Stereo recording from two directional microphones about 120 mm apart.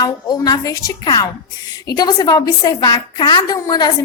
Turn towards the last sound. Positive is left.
turn(degrees=35)  # may be behind; listen again after turning